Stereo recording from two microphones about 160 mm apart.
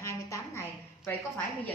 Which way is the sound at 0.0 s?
20° left (ahead or behind).